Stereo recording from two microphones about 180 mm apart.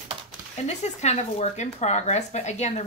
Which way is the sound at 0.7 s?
40° left (ahead or behind).